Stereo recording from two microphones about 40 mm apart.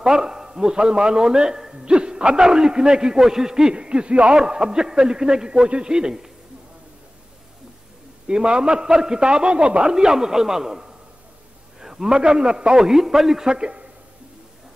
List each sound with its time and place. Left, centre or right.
0.0 s a man's voice: centre
3.7 s a man's voice: right
8.3 s a man's voice: right